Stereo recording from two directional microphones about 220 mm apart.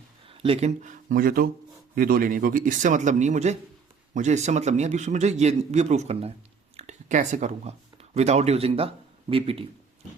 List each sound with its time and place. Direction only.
0.3 s a man's voice: 25° right (ahead or behind)